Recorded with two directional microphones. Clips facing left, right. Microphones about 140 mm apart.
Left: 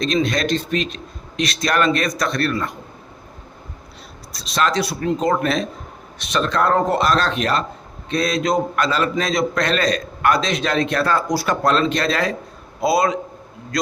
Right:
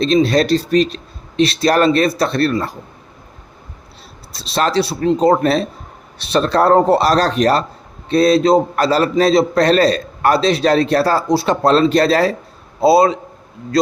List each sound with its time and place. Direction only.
0.0 s a man's voice: 30° right (ahead or behind)
4.3 s a man's voice: 30° right (ahead or behind)